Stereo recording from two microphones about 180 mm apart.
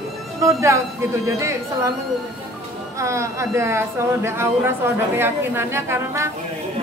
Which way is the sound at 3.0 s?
15° right (ahead or behind).